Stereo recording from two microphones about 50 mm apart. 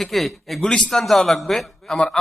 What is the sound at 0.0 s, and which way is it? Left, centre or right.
Speech, centre.